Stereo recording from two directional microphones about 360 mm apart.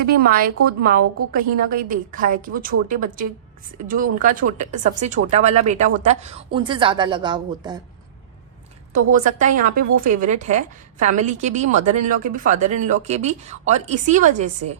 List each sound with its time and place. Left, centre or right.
0.0 s speech: right
8.9 s speech: right